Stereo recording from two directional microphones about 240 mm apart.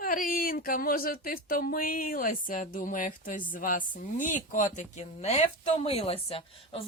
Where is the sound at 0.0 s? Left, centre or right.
Left.